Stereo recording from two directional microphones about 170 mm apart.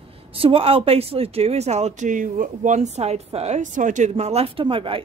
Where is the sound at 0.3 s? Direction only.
35° right (ahead or behind).